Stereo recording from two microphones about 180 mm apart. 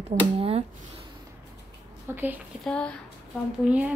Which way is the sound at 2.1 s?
10° right (ahead or behind).